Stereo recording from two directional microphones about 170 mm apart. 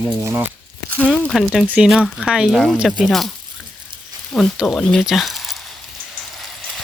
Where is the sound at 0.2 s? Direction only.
15° right (ahead or behind).